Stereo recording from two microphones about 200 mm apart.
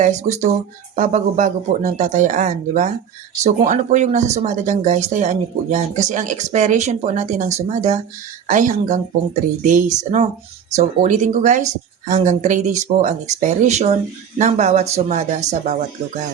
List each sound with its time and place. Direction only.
0.0 s speech: 35° right (ahead or behind)